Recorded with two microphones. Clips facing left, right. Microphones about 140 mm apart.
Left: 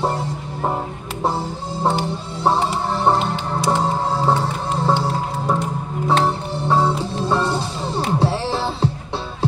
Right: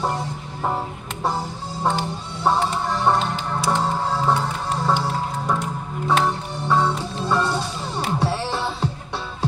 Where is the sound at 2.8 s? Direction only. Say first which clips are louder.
Left 3 dB; 30° left (ahead or behind).